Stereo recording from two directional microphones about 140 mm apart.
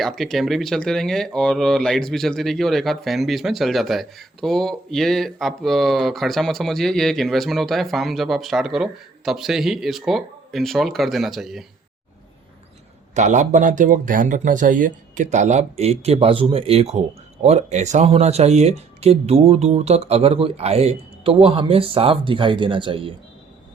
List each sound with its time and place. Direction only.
0.0 s speech: centre (ahead or behind)
13.1 s speech: 60° right (ahead or behind); by 23.1 s 40° right (ahead or behind)